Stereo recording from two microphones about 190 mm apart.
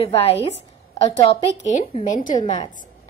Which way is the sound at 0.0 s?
30° left (ahead or behind).